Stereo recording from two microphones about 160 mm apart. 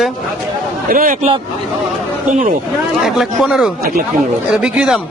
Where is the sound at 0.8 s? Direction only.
60° right (ahead or behind).